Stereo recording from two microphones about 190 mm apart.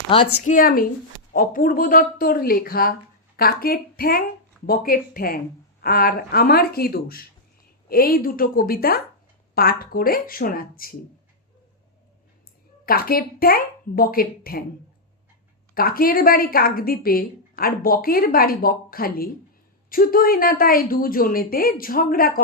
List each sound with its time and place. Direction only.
0.4 s a woman's voice: 45° left (ahead or behind)
12.8 s a woman's voice: 50° left (ahead or behind)
15.7 s a woman's voice: 50° left (ahead or behind)